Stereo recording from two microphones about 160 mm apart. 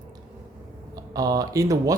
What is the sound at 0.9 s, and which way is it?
Speech, 20° right (ahead or behind).